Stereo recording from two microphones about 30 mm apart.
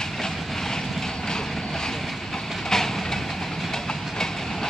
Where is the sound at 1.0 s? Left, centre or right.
Centre.